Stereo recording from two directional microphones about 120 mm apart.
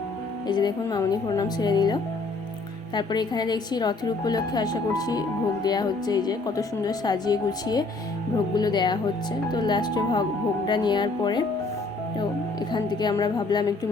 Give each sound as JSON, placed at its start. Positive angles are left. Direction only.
{"t": 0.4, "sound": "a woman's voice", "side_deg": 35}
{"t": 12.7, "sound": "a woman's voice", "side_deg": 40}